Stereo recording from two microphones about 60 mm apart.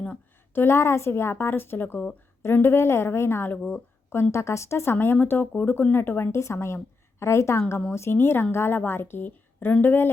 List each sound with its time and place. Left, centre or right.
0.5 s a woman's voice: left